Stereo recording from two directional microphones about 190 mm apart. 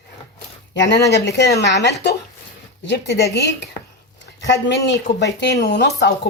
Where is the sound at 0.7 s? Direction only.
65° left (ahead or behind).